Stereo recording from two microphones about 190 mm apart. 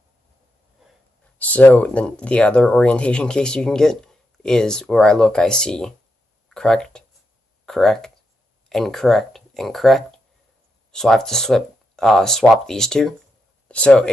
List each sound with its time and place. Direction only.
0.8 s wheeze: centre (ahead or behind)
1.4 s speech: 10° left (ahead or behind)